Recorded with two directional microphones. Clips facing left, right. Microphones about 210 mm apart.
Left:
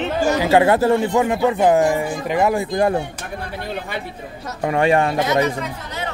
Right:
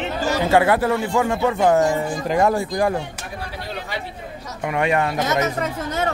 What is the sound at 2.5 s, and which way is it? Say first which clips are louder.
Speech: left 2 dB; 20° left (ahead or behind).